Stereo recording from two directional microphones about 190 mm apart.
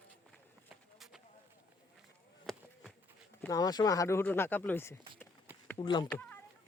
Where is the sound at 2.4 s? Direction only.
Centre (ahead or behind).